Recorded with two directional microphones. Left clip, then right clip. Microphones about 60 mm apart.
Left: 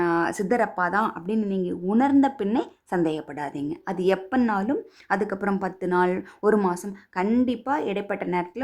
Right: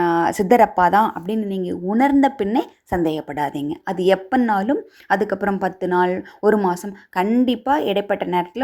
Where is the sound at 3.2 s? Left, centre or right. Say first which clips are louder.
Right 7 dB; right.